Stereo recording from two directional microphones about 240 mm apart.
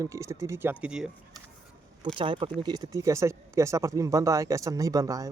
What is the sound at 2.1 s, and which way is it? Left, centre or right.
Speech, right.